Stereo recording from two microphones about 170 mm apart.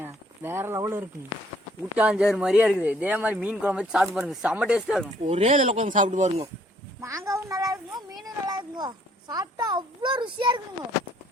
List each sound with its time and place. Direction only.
0.0 s speech: 15° right (ahead or behind)
5.2 s speech: 40° right (ahead or behind)
7.0 s a child's voice: 15° right (ahead or behind)